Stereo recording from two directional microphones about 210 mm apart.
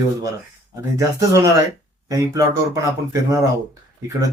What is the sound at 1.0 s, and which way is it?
Speech, 15° right (ahead or behind).